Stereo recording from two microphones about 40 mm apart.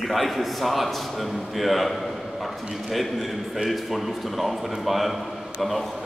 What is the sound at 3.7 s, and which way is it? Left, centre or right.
A man's voice, centre.